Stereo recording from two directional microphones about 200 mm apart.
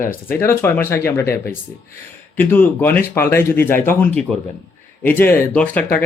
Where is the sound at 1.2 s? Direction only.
50° left (ahead or behind).